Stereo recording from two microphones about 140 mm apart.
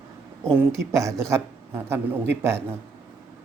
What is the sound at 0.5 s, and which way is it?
Speech, 20° right (ahead or behind).